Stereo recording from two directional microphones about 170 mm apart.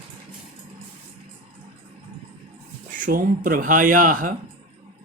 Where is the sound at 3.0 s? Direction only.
55° right (ahead or behind).